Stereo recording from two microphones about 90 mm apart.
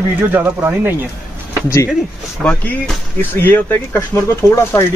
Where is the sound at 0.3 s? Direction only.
20° right (ahead or behind).